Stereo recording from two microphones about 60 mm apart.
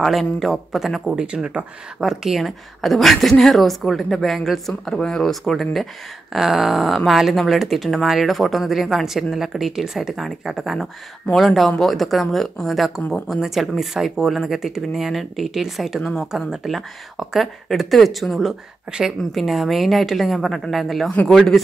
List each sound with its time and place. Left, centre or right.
0.0 s speech: centre
1.2 s speech: centre
18.9 s speech: centre
19.3 s speech: centre